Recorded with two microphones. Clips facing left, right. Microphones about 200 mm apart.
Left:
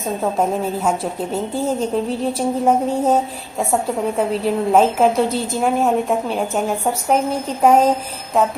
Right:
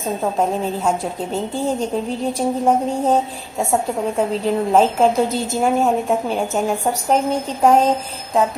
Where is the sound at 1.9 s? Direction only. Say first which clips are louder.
Left 2 dB; centre (ahead or behind).